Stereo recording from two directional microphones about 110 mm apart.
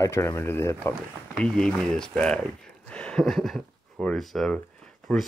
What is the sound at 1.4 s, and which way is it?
Speech, 10° left (ahead or behind).